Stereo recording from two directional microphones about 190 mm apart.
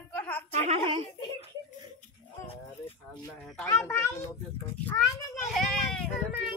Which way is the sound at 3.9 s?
15° left (ahead or behind).